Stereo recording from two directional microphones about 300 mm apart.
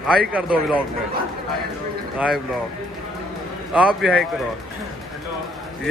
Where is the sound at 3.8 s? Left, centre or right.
Centre.